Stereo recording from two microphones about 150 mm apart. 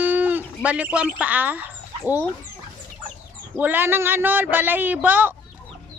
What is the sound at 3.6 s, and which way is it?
Speech, 15° right (ahead or behind).